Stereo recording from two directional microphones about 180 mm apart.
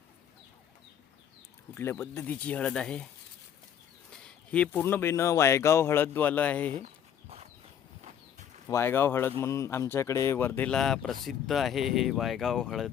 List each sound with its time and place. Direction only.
1.7 s speech: 15° left (ahead or behind)
4.1 s speech: 5° left (ahead or behind)
8.0 s a sound: 40° right (ahead or behind)
8.6 s speech: 15° left (ahead or behind)